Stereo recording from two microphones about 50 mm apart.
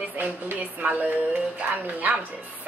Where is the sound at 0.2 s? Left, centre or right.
Right.